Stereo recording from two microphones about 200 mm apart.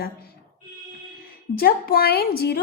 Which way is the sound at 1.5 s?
50° left (ahead or behind).